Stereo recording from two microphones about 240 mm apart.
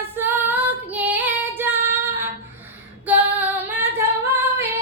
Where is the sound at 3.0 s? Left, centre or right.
Centre.